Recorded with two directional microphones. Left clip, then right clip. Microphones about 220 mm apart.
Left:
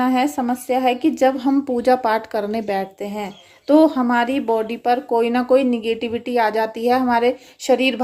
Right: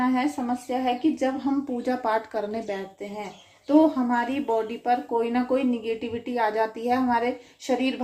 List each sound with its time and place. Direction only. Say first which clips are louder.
0.0 s speech: left 6 dB; 45° left (ahead or behind)